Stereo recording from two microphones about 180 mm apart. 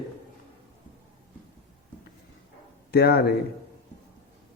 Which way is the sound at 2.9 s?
60° left (ahead or behind).